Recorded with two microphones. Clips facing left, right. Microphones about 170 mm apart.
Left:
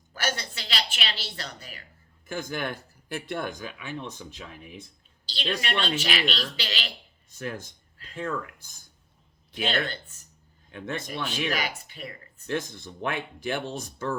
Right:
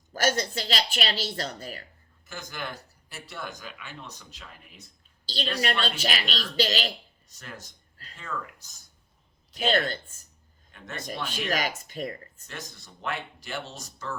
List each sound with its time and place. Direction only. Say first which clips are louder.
0.1 s speech: right 6 dB; 40° right (ahead or behind)
2.2 s speech: left 6 dB; 55° left (ahead or behind)
5.3 s speech: right 1 dB; 40° right (ahead or behind)
7.3 s speech: left 9 dB; 55° left (ahead or behind)
9.6 s speech: right 3 dB; 40° right (ahead or behind)
10.7 s a man's voice: left 6 dB; 55° left (ahead or behind)
11.1 s speech: right 2 dB; 40° right (ahead or behind)
12.5 s speech: left 12 dB; 55° left (ahead or behind)